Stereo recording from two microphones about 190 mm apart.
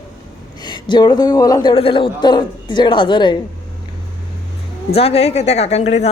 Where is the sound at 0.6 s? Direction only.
25° left (ahead or behind).